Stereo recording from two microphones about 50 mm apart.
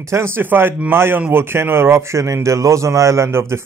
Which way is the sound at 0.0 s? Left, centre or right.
Right.